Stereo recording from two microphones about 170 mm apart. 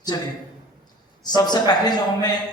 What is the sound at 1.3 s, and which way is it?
Speech, 25° left (ahead or behind).